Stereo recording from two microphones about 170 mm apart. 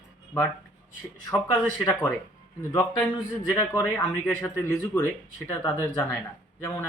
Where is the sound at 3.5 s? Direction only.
15° left (ahead or behind).